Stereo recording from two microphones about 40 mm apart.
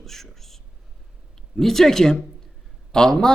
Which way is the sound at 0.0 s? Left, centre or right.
Centre.